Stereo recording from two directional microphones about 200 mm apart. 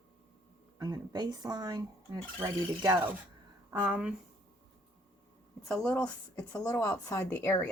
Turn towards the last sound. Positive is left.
turn(degrees=10)  # may be behind; listen again after turning